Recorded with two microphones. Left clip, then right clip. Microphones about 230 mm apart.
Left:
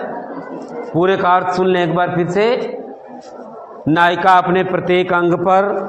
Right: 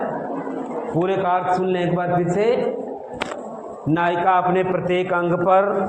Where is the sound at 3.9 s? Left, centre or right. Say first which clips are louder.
Left 7 dB; left.